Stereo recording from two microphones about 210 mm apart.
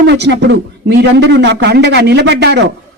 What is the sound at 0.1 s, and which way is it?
A man's voice, 55° right (ahead or behind).